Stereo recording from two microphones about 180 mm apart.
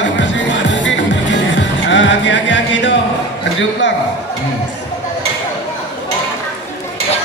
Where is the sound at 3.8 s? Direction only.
90° left.